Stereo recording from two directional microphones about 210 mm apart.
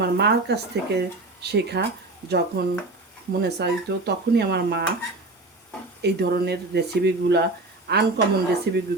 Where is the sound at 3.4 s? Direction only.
50° right (ahead or behind).